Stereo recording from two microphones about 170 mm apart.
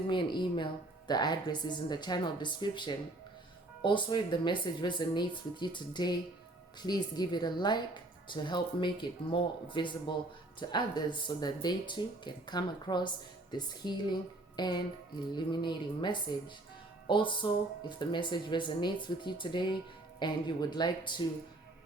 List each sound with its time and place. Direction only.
0.1 s a woman's voice: 30° left (ahead or behind)